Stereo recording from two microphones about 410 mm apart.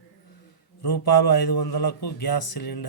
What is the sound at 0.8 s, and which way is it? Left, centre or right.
Speech, left.